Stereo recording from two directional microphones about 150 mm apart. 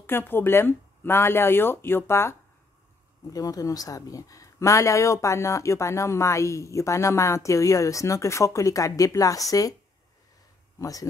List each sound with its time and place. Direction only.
0.0 s speech: 15° left (ahead or behind)
10.8 s speech: 25° left (ahead or behind)